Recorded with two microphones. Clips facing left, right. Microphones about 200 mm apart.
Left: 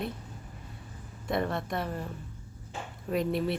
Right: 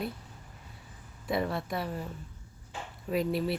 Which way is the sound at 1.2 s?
5° right (ahead or behind).